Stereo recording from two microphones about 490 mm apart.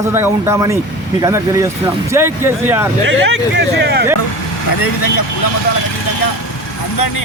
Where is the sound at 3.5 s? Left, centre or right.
Centre.